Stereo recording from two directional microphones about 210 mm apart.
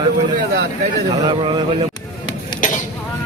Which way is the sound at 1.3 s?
25° right (ahead or behind).